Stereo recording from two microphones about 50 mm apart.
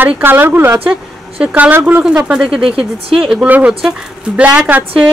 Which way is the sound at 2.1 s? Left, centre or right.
Right.